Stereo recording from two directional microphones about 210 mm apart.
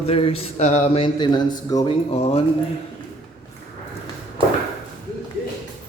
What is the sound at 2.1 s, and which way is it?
Speech, 30° left (ahead or behind).